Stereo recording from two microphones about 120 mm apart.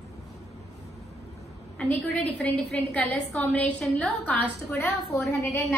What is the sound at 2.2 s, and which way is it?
A woman's voice, 10° left (ahead or behind).